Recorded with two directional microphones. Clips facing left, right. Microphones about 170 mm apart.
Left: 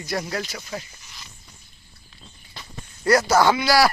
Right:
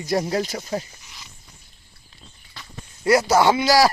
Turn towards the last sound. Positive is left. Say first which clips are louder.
# right 1 dB
turn(degrees=-25)  # may be behind; listen again after turning